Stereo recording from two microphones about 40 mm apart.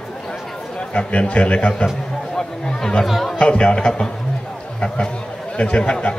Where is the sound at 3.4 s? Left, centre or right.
Left.